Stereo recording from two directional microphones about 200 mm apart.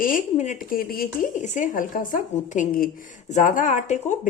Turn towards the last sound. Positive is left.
turn(degrees=35)  # may be behind; listen again after turning